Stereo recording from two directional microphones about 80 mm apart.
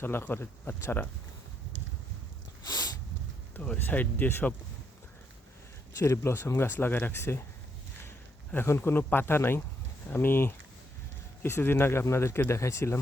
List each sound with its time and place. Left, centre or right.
0.0 s speech: left
2.6 s a sound: left
3.5 s speech: left
6.0 s speech: left
8.5 s speech: left